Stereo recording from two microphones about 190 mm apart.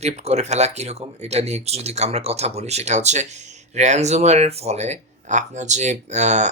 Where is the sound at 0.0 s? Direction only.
35° right (ahead or behind).